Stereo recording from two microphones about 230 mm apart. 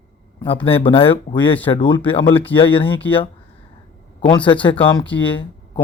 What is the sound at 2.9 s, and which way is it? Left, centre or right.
Speech, centre.